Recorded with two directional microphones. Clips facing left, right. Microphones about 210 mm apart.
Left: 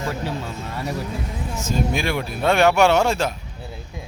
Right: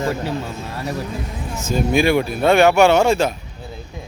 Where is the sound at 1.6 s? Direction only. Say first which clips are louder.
Right 6 dB; 5° right (ahead or behind).